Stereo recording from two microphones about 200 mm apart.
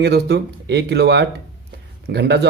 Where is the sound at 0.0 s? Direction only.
55° right (ahead or behind).